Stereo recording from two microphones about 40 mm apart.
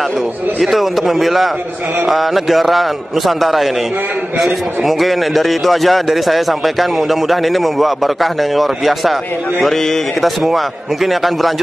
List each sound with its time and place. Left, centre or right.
0.6 s a man's voice: centre